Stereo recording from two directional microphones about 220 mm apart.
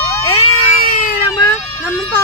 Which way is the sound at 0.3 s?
35° left (ahead or behind).